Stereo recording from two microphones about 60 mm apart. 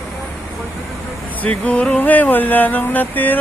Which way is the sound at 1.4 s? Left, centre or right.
Left.